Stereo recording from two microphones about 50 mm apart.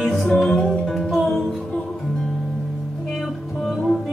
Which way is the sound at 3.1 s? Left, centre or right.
Centre.